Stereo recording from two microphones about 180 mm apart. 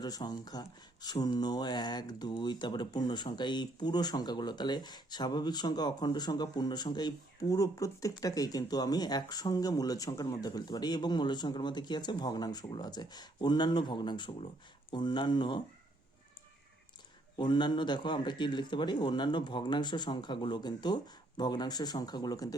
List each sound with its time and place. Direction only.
0.2 s speech: 20° left (ahead or behind)
17.3 s speech: 25° left (ahead or behind)